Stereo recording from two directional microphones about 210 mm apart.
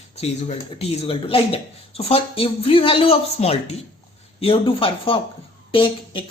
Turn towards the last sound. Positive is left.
turn(degrees=25)  # may be behind; listen again after turning